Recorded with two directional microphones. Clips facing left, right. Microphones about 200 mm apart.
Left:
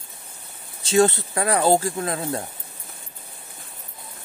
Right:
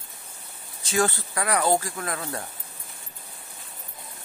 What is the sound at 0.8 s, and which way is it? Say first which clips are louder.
Speech: left 7 dB; 25° left (ahead or behind).